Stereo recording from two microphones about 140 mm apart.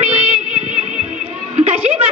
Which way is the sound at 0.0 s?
55° right (ahead or behind).